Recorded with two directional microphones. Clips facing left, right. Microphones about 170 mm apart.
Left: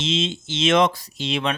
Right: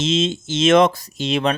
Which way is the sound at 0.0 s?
45° right (ahead or behind).